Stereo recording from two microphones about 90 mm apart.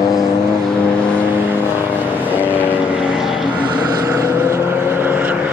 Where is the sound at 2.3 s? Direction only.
20° left (ahead or behind).